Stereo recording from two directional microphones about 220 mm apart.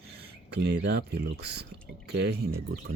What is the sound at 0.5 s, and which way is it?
Speech, 50° right (ahead or behind).